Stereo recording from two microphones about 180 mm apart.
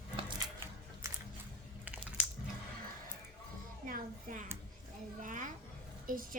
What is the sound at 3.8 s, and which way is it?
Speech, 50° right (ahead or behind).